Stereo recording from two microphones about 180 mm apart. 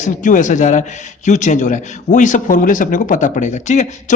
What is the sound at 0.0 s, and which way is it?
A man's voice, 45° left (ahead or behind).